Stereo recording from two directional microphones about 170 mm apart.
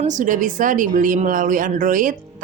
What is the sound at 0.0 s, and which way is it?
A woman's voice, 45° right (ahead or behind).